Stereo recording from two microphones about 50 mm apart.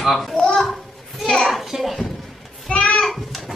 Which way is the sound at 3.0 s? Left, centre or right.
Centre.